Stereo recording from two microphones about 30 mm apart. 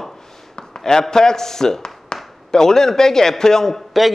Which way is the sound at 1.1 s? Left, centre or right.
Centre.